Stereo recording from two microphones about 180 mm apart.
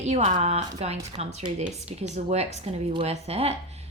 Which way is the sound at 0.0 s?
40° right (ahead or behind).